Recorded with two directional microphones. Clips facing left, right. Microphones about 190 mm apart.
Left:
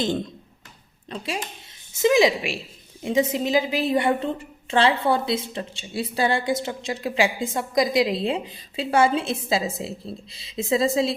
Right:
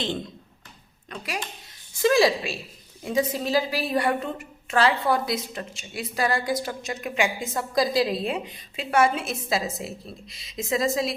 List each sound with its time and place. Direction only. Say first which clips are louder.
1.1 s a woman's voice: left 3 dB; 25° left (ahead or behind)